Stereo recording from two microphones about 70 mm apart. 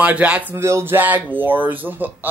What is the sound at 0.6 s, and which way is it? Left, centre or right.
Speech, right.